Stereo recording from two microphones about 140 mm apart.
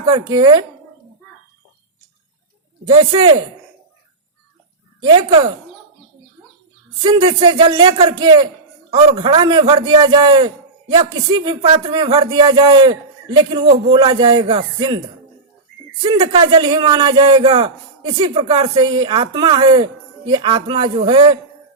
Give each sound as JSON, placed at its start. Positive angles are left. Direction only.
{"t": 0.1, "sound": "speech", "side_deg": -30}
{"t": 2.9, "sound": "speech", "side_deg": -35}
{"t": 4.9, "sound": "speech", "side_deg": -35}
{"t": 7.0, "sound": "speech", "side_deg": -35}
{"t": 16.0, "sound": "speech", "side_deg": -45}
{"t": 16.5, "sound": "speech", "side_deg": -35}